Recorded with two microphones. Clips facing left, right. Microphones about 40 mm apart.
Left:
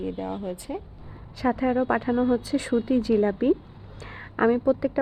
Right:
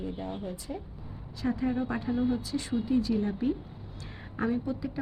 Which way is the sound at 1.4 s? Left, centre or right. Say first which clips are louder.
Left 7 dB; left.